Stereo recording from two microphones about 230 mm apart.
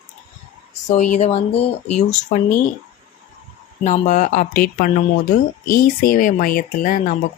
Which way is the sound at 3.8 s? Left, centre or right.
Left.